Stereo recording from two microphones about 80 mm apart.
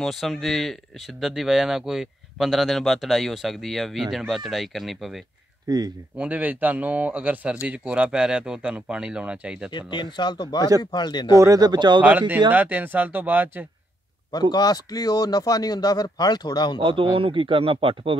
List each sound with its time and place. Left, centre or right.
0.0 s speech: centre
5.7 s speech: right
6.1 s speech: centre
9.7 s speech: left
11.3 s speech: right
12.0 s speech: right
14.5 s speech: left
16.8 s speech: right